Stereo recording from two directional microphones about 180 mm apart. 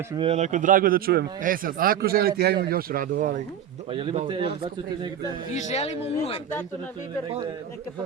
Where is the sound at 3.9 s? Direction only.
30° right (ahead or behind).